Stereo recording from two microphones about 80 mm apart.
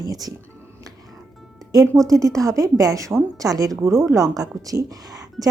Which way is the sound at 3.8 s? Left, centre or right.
Right.